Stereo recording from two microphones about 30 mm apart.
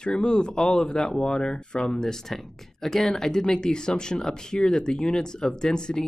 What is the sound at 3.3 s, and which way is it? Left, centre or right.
Speech, left.